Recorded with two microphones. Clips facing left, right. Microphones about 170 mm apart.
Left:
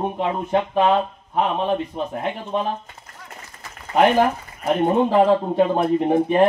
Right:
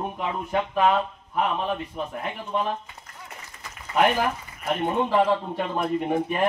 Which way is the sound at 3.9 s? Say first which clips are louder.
Left 6 dB; 40° left (ahead or behind).